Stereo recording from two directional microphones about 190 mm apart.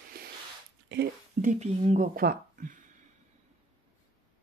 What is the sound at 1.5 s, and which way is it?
Speech, 35° right (ahead or behind).